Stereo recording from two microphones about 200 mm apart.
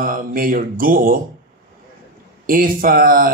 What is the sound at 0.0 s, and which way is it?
Speech, 45° right (ahead or behind).